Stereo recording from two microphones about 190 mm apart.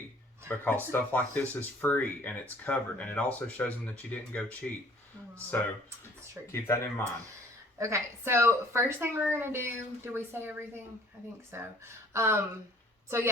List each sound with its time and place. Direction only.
0.4 s speech: 10° left (ahead or behind)
7.8 s a woman's voice: 15° right (ahead or behind)